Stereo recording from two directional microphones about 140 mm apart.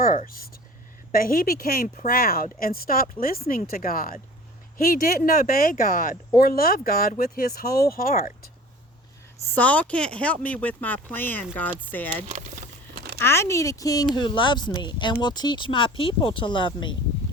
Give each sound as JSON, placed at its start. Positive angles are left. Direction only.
{"t": 0.0, "sound": "speech", "side_deg": 75}
{"t": 1.1, "sound": "speech", "side_deg": 90}
{"t": 9.5, "sound": "speech", "side_deg": 10}
{"t": 13.2, "sound": "speech", "side_deg": 20}